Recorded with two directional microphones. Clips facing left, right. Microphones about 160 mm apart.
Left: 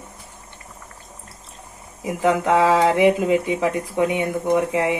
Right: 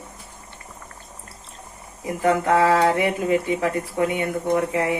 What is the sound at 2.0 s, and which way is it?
Speech, 20° left (ahead or behind).